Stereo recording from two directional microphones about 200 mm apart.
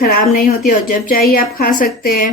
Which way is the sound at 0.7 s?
45° left (ahead or behind).